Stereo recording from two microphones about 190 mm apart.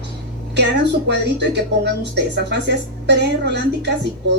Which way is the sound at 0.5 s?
65° right (ahead or behind).